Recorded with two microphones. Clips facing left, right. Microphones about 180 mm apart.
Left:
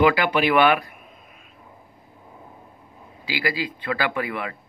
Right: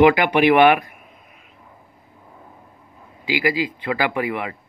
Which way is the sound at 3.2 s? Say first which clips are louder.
Right 5 dB; 15° right (ahead or behind).